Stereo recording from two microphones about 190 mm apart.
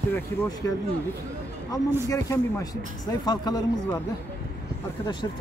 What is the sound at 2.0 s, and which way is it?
Speech, 15° left (ahead or behind).